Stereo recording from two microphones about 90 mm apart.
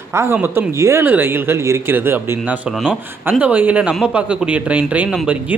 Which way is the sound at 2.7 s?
5° right (ahead or behind).